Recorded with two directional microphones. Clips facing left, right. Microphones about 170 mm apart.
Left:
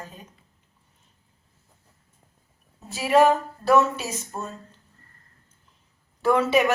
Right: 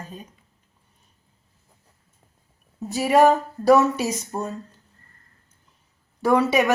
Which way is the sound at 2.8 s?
40° right (ahead or behind).